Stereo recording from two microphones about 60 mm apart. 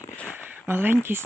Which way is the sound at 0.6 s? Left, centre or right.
Right.